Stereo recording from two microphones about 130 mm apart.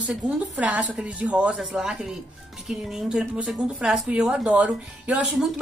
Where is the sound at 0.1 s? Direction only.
10° right (ahead or behind).